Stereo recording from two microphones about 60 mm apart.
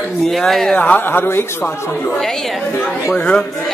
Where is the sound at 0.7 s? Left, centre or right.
Left.